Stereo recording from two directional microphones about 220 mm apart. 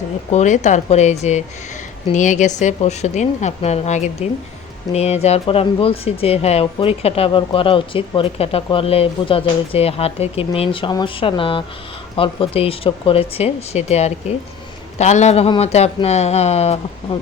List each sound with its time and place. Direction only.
0.3 s a woman's voice: 30° left (ahead or behind)